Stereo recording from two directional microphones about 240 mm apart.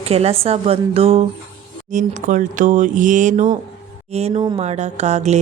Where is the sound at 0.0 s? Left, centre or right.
Right.